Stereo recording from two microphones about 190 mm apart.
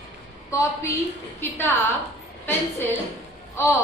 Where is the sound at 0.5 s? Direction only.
15° left (ahead or behind).